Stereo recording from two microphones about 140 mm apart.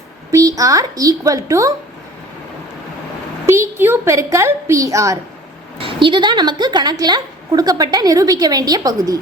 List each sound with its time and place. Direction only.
0.3 s a woman's voice: 25° right (ahead or behind)
3.4 s a woman's voice: 20° right (ahead or behind)
5.8 s a woman's voice: 35° right (ahead or behind)